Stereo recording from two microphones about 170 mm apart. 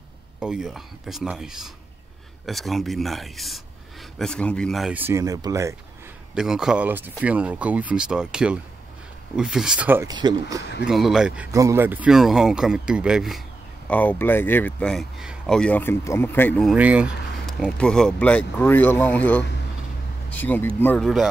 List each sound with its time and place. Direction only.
0.4 s speech: 5° right (ahead or behind)
6.3 s speech: 5° right (ahead or behind)
10.0 s speech: 25° right (ahead or behind)
10.6 s speech: 90° left
10.9 s speech: centre (ahead or behind)
11.5 s speech: 15° right (ahead or behind)
13.8 s speech: 10° left (ahead or behind)
16.6 s speech: 10° right (ahead or behind)
17.5 s speech: 5° left (ahead or behind)